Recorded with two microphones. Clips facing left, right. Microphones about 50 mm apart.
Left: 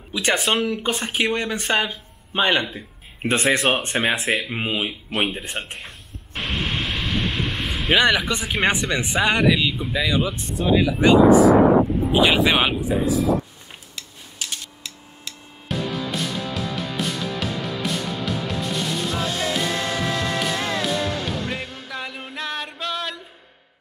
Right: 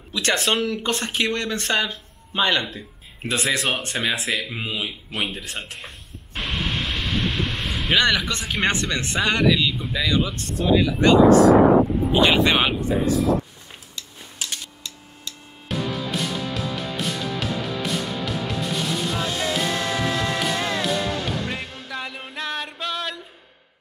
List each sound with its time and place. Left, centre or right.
0.1 s speech: centre
3.2 s speech: left
6.3 s a sound: centre
6.6 s vehicle: centre
8.0 s speech: centre
15.7 s music: centre